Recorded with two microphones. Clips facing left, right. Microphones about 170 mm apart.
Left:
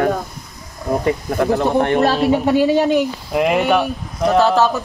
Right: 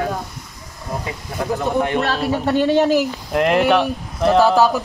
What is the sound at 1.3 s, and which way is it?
Speech, 65° left (ahead or behind).